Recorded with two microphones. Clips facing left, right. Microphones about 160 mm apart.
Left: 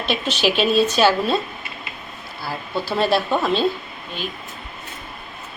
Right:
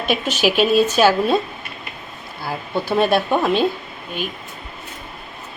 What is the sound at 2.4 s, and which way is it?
Speech, 20° right (ahead or behind).